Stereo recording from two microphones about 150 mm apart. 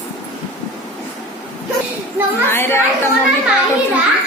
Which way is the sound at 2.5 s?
15° left (ahead or behind).